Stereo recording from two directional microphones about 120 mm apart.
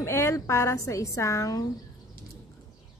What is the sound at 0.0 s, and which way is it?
A woman's voice, 25° left (ahead or behind).